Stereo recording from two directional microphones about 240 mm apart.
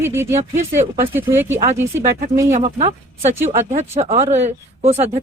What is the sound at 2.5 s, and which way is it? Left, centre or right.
Speech, right.